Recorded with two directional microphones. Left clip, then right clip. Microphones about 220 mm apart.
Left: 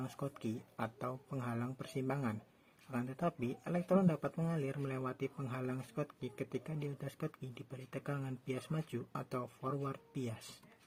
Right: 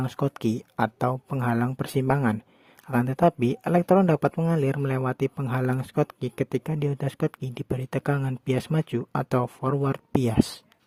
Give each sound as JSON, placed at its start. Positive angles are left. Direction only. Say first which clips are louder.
{"t": 0.0, "sound": "speech", "louder": "right 16 dB", "side_deg": -45}